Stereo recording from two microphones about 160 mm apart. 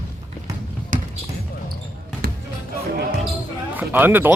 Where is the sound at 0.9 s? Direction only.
55° right (ahead or behind).